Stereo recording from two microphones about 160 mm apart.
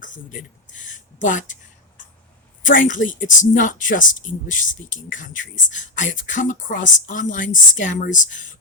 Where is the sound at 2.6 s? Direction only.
55° left (ahead or behind).